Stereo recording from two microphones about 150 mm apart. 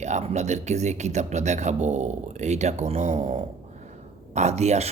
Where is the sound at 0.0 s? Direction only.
50° right (ahead or behind).